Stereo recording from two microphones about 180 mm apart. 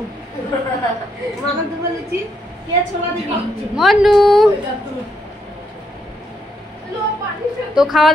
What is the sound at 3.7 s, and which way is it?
Speech, centre (ahead or behind).